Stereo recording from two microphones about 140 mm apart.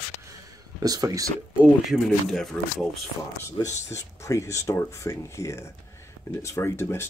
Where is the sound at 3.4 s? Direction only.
20° left (ahead or behind).